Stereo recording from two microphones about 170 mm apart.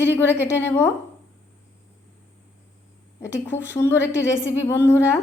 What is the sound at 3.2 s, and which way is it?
A woman's voice, 15° left (ahead or behind).